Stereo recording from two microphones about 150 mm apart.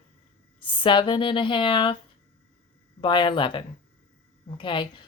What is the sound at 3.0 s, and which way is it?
Speech, 30° left (ahead or behind).